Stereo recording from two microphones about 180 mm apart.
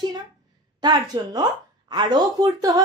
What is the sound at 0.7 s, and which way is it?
Speech, 25° right (ahead or behind).